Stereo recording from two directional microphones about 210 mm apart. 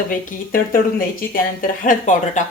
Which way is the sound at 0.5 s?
40° left (ahead or behind).